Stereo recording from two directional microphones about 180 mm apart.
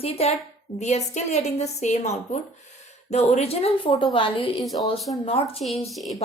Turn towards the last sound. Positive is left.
turn(degrees=0)  # may be behind; listen again after turning